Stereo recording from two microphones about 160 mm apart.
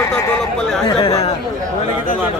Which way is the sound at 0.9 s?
35° left (ahead or behind).